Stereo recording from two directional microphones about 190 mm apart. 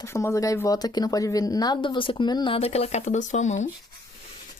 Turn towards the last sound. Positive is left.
turn(degrees=40)  # may be behind; listen again after turning